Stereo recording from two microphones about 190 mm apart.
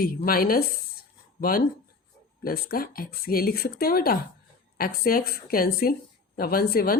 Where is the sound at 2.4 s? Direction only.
50° left (ahead or behind).